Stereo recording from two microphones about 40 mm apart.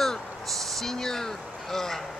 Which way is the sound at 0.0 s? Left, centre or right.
Centre.